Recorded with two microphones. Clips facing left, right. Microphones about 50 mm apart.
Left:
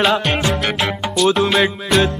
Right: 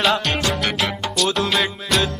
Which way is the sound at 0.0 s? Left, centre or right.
Centre.